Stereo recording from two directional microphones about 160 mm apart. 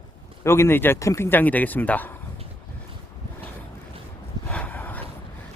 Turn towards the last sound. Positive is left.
turn(degrees=10)  # may be behind; listen again after turning